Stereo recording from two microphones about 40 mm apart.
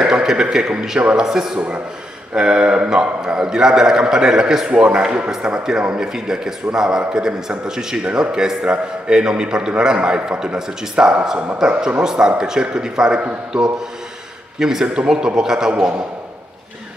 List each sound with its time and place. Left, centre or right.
0.0 s a man's voice: centre